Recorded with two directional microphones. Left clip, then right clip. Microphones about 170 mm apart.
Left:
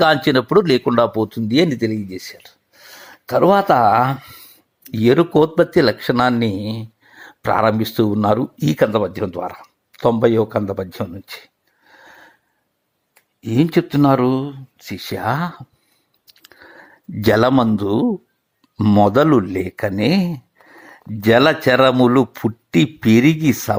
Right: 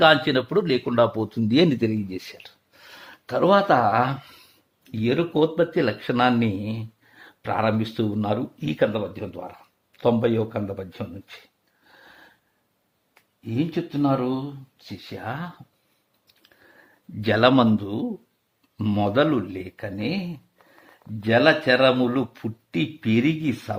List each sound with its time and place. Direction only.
0.0 s speech: 40° left (ahead or behind)
0.9 s speech: 30° left (ahead or behind)
4.8 s speech: 40° left (ahead or behind)
8.9 s speech: 50° left (ahead or behind)
11.9 s a sound: 25° left (ahead or behind)
13.1 s speech: 50° left (ahead or behind)
17.2 s speech: 40° left (ahead or behind)
21.2 s speech: 45° left (ahead or behind)